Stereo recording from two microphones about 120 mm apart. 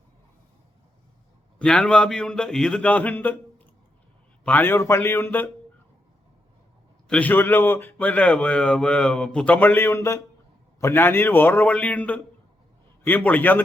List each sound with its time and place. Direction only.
1.5 s a man's voice: 5° left (ahead or behind)
4.4 s a man's voice: 15° left (ahead or behind)
7.1 s speech: 15° left (ahead or behind)